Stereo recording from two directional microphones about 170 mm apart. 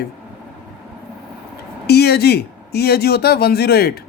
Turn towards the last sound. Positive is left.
turn(degrees=65)  # may be behind; listen again after turning